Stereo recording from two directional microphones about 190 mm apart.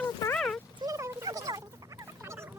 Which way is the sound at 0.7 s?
15° right (ahead or behind).